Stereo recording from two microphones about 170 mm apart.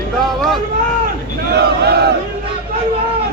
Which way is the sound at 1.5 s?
75° right (ahead or behind).